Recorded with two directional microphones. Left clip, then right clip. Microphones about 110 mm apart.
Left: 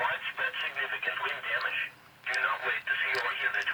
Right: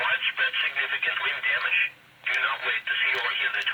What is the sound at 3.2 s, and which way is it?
Radio, 15° left (ahead or behind).